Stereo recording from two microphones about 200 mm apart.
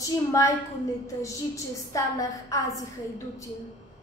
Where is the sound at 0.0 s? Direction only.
15° left (ahead or behind).